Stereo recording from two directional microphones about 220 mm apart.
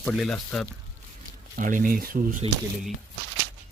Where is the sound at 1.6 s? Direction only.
35° right (ahead or behind).